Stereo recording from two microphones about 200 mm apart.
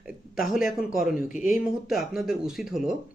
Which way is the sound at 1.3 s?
40° left (ahead or behind).